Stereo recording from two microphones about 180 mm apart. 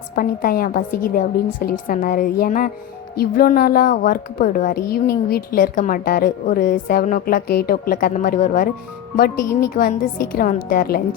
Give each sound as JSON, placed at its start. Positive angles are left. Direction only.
{"t": 0.2, "sound": "a woman's voice", "side_deg": 55}